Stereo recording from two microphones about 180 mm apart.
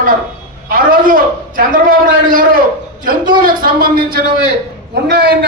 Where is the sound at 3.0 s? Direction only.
50° right (ahead or behind).